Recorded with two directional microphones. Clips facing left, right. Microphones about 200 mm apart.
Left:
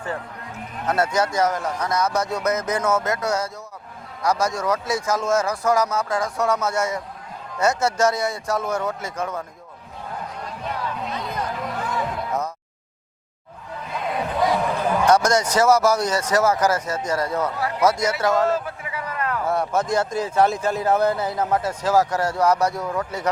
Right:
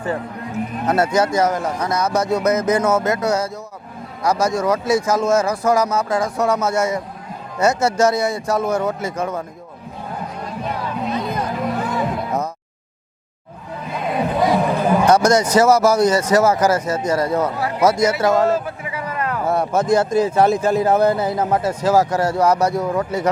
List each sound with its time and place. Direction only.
0.0 s a man's voice: 10° right (ahead or behind)
10.1 s chatter: 10° right (ahead or behind)
13.8 s a man's voice: 10° right (ahead or behind)
22.8 s speech: 20° right (ahead or behind)